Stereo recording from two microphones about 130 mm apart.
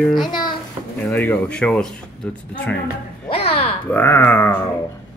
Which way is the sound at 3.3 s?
50° left (ahead or behind).